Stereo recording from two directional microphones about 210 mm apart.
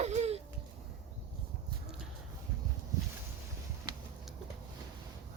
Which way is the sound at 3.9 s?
20° right (ahead or behind).